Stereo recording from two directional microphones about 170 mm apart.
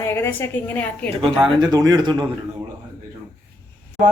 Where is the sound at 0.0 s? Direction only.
15° left (ahead or behind).